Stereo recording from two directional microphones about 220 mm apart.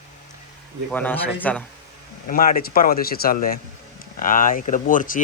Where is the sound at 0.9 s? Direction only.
5° left (ahead or behind).